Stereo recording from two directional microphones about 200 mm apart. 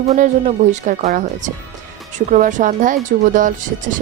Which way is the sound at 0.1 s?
35° right (ahead or behind).